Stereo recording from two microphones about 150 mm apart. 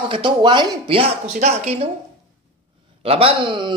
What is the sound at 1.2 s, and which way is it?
Speech, 50° right (ahead or behind).